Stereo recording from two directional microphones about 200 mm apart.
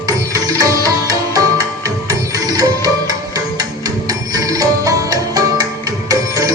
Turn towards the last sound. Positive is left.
turn(degrees=-15)  # may be behind; listen again after turning